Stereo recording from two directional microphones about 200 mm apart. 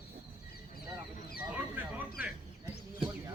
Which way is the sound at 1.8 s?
10° right (ahead or behind).